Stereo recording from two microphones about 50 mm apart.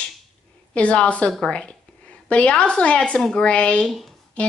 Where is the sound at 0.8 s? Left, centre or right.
Left.